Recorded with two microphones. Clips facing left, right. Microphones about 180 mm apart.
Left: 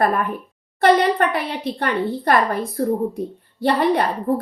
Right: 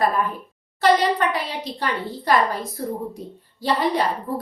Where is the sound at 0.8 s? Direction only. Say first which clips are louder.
Left 3 dB; 60° left (ahead or behind).